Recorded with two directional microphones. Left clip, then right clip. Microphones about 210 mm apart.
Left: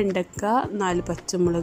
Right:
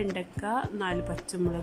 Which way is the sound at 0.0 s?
20° left (ahead or behind).